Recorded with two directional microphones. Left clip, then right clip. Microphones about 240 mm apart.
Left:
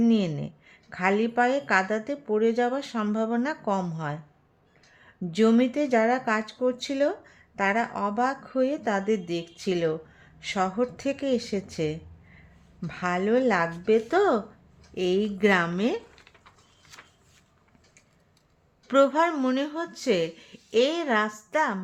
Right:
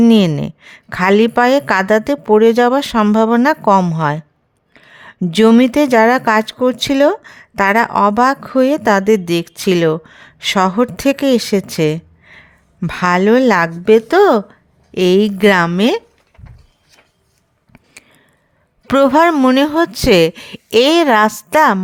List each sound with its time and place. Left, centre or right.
0.0 s speech: right
18.9 s speech: right